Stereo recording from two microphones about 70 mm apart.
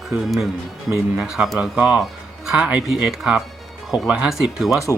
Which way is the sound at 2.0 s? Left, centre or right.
Centre.